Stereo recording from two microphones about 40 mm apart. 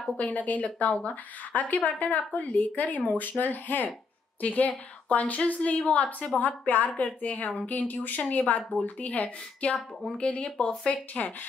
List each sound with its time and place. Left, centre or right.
0.2 s a woman's voice: left
4.4 s a woman's voice: left
10.7 s speech: centre
11.2 s a woman's voice: left